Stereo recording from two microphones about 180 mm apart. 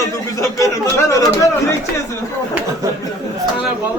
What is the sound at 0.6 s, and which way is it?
Speech, 20° left (ahead or behind).